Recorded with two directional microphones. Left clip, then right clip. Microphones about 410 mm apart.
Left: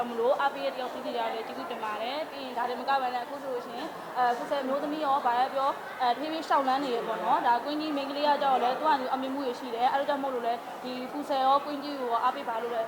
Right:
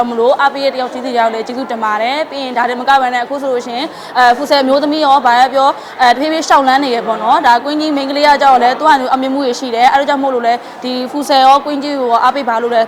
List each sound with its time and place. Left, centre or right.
0.3 s a woman's voice: right